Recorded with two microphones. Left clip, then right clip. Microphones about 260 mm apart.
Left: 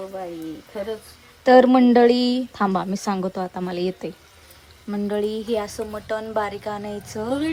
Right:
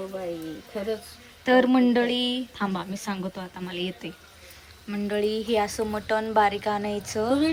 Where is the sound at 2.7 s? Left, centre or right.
Left.